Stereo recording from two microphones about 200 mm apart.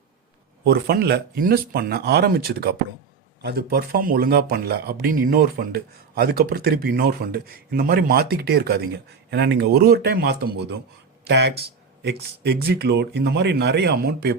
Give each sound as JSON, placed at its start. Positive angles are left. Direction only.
{"t": 0.6, "sound": "speech", "side_deg": -50}